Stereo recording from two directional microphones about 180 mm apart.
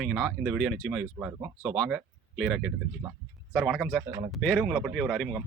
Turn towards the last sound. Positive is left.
turn(degrees=0)  # may be behind; listen again after turning